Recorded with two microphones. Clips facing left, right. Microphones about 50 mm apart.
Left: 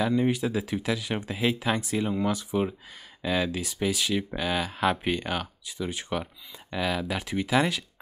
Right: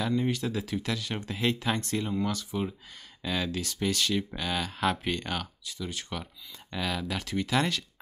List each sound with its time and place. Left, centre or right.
0.0 s speech: centre